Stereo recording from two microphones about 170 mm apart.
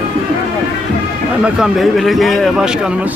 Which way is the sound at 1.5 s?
Centre (ahead or behind).